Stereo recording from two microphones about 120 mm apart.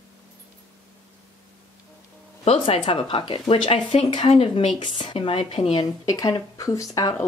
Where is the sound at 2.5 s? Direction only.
50° left (ahead or behind).